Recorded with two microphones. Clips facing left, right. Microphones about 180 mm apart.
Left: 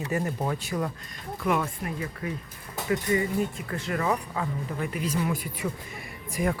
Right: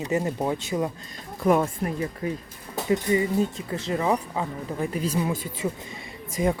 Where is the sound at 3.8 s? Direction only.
20° right (ahead or behind).